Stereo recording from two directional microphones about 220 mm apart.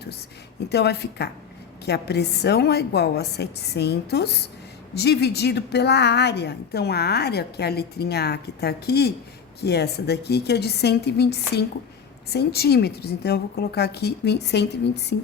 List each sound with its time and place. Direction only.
0.7 s a woman's voice: 50° left (ahead or behind)